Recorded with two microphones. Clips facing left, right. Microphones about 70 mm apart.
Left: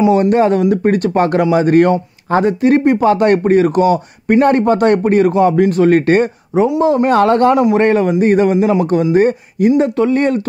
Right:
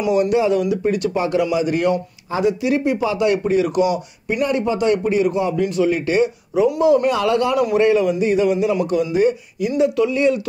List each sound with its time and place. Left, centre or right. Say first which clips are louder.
0.0 s speech: left 6 dB; left